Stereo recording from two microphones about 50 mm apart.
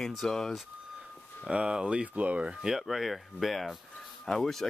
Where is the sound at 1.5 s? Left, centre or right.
Centre.